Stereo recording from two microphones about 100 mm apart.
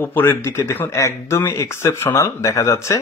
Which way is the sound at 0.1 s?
20° left (ahead or behind).